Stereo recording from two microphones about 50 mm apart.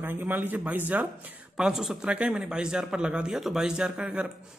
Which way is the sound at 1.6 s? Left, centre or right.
Centre.